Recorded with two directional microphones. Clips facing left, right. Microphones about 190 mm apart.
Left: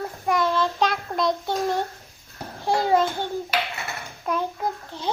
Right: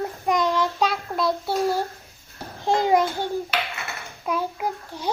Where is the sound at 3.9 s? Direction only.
5° right (ahead or behind).